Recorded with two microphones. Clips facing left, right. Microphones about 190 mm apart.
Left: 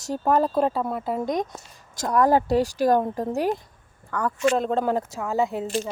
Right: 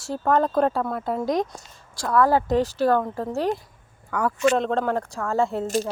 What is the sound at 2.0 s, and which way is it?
Speech, 20° left (ahead or behind).